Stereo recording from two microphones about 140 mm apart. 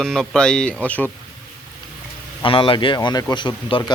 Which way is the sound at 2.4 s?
40° left (ahead or behind).